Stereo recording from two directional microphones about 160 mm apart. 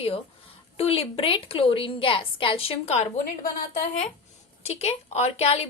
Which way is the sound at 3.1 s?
60° left (ahead or behind).